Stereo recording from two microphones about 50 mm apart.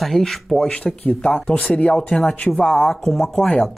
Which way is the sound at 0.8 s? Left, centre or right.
Left.